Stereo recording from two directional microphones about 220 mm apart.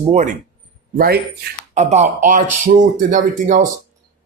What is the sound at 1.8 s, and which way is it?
Speech, 30° right (ahead or behind).